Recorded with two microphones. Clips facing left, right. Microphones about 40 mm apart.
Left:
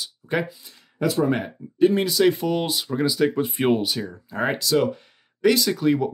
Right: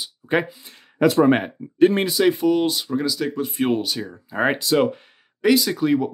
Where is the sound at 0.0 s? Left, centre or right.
Right.